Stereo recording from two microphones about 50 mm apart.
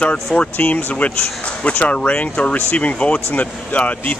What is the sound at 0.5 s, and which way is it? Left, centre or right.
Speech, left.